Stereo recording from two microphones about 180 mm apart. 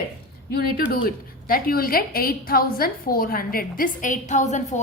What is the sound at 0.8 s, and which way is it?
A woman's voice, 55° left (ahead or behind).